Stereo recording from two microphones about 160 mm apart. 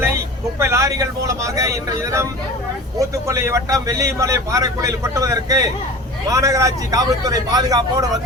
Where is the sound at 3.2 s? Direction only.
20° right (ahead or behind).